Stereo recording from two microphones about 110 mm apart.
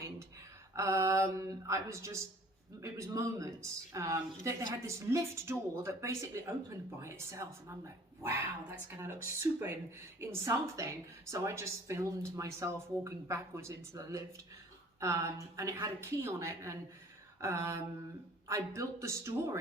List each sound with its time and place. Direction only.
0.8 s a woman's voice: 30° right (ahead or behind)